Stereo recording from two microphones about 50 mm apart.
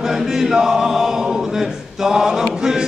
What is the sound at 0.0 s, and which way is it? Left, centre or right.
Choir, centre.